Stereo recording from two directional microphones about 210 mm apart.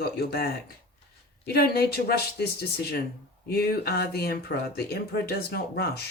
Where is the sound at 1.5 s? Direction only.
45° left (ahead or behind).